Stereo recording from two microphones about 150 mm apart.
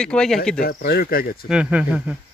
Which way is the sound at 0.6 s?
90° left.